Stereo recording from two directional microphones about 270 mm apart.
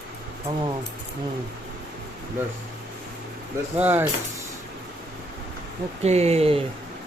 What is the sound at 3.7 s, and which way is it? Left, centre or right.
Speech, centre.